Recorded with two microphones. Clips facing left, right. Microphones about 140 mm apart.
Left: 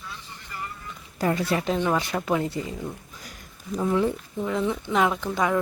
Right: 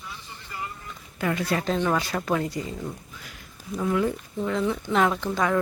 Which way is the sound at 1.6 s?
15° left (ahead or behind).